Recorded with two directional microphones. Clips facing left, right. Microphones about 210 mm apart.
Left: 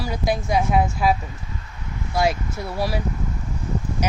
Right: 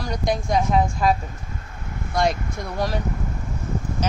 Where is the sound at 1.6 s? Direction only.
50° right (ahead or behind).